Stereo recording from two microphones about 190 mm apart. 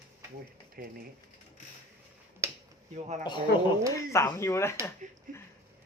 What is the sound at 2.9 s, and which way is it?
Speech, 35° right (ahead or behind).